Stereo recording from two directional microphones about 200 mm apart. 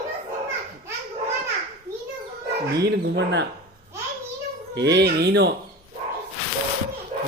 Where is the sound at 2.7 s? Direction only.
55° right (ahead or behind).